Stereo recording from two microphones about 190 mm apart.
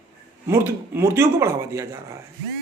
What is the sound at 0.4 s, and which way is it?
Speech, 15° right (ahead or behind).